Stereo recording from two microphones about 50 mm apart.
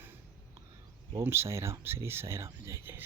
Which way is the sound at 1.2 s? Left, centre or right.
Right.